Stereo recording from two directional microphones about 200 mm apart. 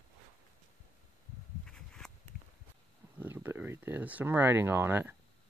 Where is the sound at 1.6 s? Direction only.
5° left (ahead or behind).